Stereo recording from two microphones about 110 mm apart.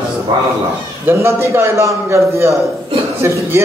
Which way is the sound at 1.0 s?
25° right (ahead or behind).